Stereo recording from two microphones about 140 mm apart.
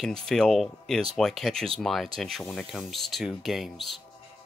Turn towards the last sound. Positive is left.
turn(degrees=0)  # may be behind; listen again after turning